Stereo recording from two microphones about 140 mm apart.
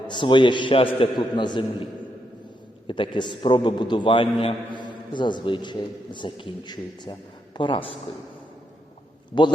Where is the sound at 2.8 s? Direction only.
35° left (ahead or behind).